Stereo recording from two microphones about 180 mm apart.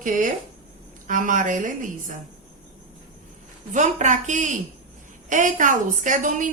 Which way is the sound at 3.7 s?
40° right (ahead or behind).